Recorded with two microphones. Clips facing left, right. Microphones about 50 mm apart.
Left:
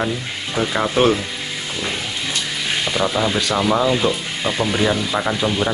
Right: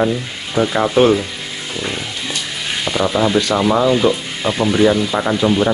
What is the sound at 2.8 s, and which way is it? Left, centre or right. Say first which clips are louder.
Speech: right 4 dB; centre.